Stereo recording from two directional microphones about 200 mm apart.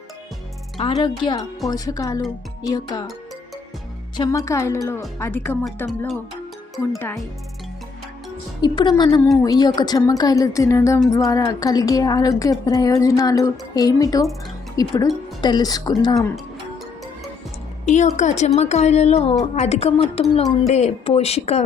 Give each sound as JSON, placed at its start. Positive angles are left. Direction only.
{"t": 0.8, "sound": "a woman's voice", "side_deg": 25}
{"t": 4.2, "sound": "a woman's voice", "side_deg": 15}
{"t": 8.6, "sound": "a woman's voice", "side_deg": 20}
{"t": 17.8, "sound": "a woman's voice", "side_deg": 35}